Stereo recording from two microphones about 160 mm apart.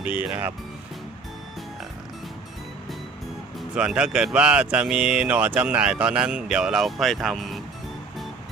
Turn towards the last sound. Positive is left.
turn(degrees=0)  # may be behind; listen again after turning